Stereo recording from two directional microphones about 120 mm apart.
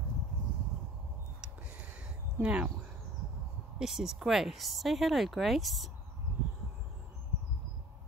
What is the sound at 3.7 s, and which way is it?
Speech, 5° right (ahead or behind).